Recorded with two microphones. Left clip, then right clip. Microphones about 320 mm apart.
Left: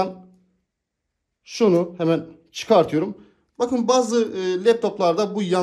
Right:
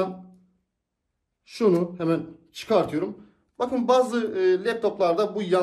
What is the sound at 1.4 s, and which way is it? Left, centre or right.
Speech, centre.